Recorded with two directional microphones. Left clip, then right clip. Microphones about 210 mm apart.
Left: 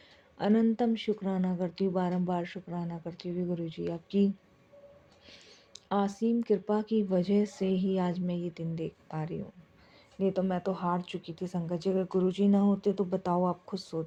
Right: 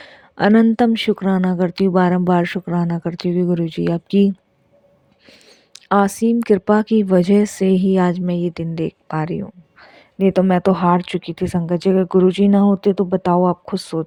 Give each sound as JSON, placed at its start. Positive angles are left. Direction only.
{"t": 0.0, "sound": "speech", "side_deg": -55}
{"t": 5.3, "sound": "speech", "side_deg": -50}